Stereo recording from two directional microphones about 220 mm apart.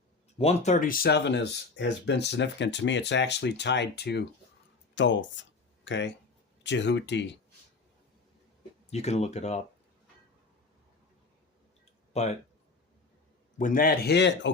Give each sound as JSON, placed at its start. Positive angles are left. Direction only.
{"t": 0.3, "sound": "speech", "side_deg": 30}
{"t": 8.9, "sound": "speech", "side_deg": 30}
{"t": 12.1, "sound": "speech", "side_deg": 30}
{"t": 13.6, "sound": "speech", "side_deg": 40}